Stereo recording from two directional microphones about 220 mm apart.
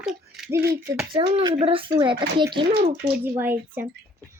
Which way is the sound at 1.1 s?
25° right (ahead or behind).